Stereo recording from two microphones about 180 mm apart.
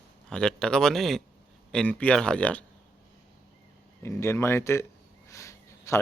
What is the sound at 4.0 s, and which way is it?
Speech, 15° left (ahead or behind).